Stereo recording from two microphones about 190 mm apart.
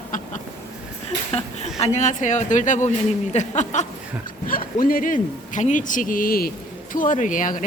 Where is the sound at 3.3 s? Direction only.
40° left (ahead or behind).